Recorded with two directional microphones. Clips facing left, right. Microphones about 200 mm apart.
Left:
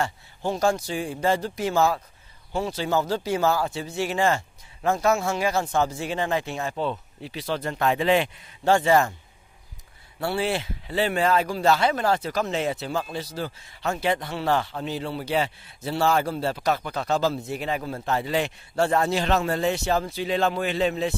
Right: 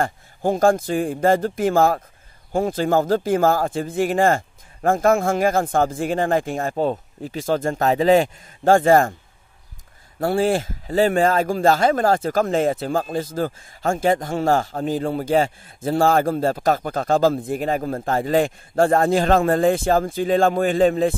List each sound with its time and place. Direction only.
0.0 s speech: 50° right (ahead or behind)
10.2 s speech: 45° right (ahead or behind)